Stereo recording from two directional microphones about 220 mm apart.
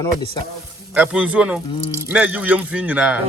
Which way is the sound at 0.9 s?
5° right (ahead or behind).